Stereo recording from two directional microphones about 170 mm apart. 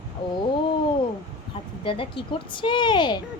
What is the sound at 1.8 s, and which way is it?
Speech, 30° left (ahead or behind).